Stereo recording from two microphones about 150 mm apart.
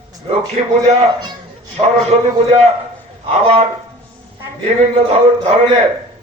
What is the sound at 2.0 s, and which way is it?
A man's voice, 45° right (ahead or behind).